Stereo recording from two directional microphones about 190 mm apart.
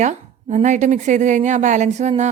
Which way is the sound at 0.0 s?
40° right (ahead or behind).